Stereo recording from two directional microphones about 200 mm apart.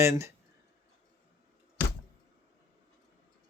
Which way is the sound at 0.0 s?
15° right (ahead or behind).